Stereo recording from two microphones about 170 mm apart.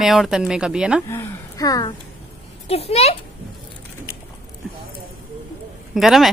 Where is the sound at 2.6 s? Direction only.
35° left (ahead or behind).